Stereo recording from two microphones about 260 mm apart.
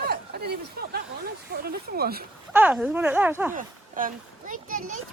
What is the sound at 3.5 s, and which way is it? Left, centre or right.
A child's voice, right.